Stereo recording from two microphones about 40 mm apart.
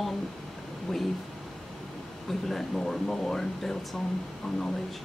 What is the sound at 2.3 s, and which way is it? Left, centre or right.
A woman's voice, centre.